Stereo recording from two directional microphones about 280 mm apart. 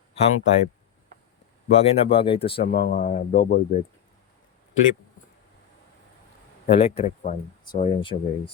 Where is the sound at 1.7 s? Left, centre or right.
Left.